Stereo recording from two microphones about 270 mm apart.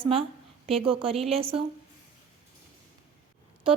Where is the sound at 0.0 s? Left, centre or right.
Right.